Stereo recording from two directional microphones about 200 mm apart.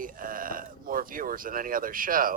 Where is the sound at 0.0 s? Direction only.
45° right (ahead or behind).